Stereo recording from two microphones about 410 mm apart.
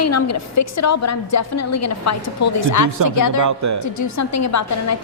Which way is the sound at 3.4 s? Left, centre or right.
Right.